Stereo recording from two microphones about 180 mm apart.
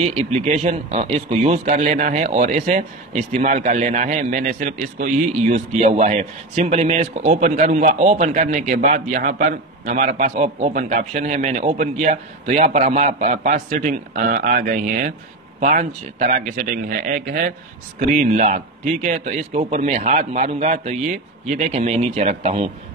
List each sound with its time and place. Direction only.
0.0 s a man's voice: 35° right (ahead or behind)